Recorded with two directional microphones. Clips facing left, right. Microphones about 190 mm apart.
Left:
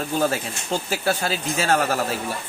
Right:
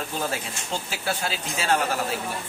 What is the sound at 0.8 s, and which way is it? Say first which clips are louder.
Speech: left 6 dB; 45° left (ahead or behind).